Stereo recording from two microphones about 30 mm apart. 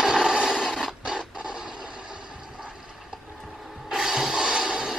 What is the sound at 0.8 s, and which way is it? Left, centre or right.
Printer, right.